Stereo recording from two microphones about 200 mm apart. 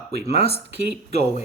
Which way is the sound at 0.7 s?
55° right (ahead or behind).